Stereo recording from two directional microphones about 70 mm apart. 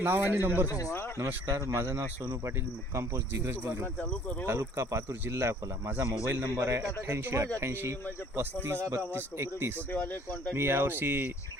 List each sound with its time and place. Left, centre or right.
0.0 s speech: right
0.7 s speech: left
1.2 s speech: right
2.2 s speech: right
4.4 s speech: right